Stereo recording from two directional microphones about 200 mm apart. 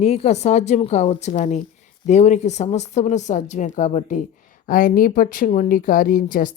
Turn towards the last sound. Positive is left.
turn(degrees=45)  # may be behind; listen again after turning